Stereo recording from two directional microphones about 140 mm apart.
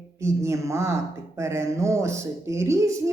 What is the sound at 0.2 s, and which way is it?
Speech, 20° right (ahead or behind).